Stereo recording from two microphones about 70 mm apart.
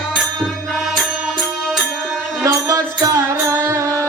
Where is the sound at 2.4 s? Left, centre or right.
Right.